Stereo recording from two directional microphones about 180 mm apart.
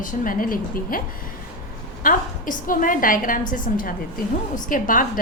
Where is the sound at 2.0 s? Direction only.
50° left (ahead or behind).